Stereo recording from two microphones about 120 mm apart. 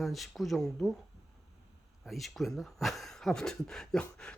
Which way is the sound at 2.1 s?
Centre (ahead or behind).